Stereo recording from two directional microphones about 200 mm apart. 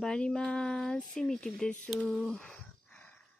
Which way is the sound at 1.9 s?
Centre (ahead or behind).